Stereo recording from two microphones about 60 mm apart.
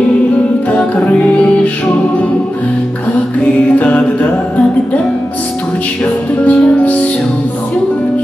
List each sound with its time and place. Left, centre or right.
0.7 s music: left
3.7 s music: left
6.4 s music: left